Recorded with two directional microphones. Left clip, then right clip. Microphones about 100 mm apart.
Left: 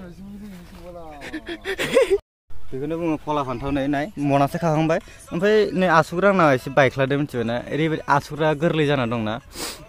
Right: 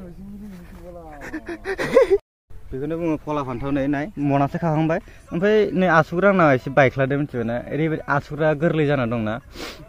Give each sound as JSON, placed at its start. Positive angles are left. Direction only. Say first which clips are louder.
{"t": 1.2, "sound": "a sound", "louder": "right 1 dB", "side_deg": 45}
{"t": 1.7, "sound": "speech", "louder": "right 2 dB", "side_deg": 0}
{"t": 4.2, "sound": "speech", "louder": "left 2 dB", "side_deg": 35}
{"t": 5.4, "sound": "speech", "louder": "even", "side_deg": 15}
{"t": 7.2, "sound": "speech", "louder": "left 1 dB", "side_deg": 40}